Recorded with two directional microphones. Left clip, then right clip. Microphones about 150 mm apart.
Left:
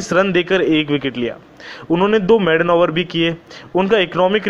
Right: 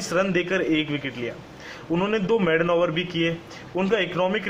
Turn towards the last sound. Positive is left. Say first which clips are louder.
# left 8 dB
turn(degrees=30)  # may be behind; listen again after turning